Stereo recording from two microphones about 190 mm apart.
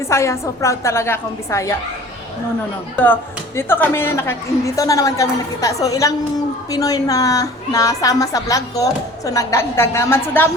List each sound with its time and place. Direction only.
0.1 s a woman's voice: 15° left (ahead or behind)
2.9 s a woman's voice: 10° left (ahead or behind)